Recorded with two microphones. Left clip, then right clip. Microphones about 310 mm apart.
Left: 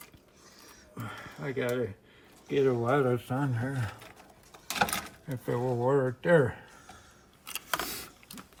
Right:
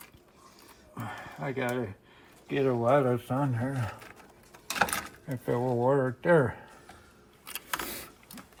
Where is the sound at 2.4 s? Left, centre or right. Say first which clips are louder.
Right 1 dB; centre.